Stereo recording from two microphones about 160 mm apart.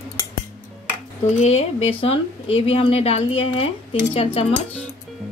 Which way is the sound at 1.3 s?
45° left (ahead or behind).